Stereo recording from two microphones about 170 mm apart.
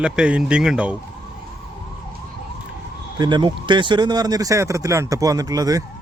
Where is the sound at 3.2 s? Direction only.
25° right (ahead or behind).